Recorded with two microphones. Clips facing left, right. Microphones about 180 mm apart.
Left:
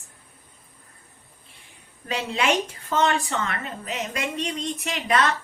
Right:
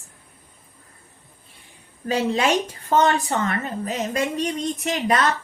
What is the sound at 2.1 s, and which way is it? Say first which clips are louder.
A woman's voice: right 3 dB; 40° right (ahead or behind).